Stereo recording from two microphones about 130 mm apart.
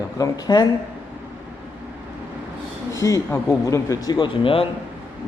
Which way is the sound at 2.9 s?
25° left (ahead or behind).